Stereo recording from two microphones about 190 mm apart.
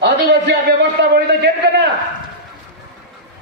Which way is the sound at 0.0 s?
65° right (ahead or behind).